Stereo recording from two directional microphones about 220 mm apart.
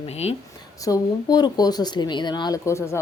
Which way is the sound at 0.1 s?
30° left (ahead or behind).